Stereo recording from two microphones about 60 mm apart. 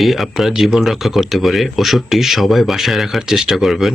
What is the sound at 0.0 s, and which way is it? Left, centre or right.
Speech, centre.